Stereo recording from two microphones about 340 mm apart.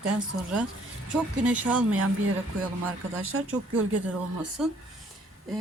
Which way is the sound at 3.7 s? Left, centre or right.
Right.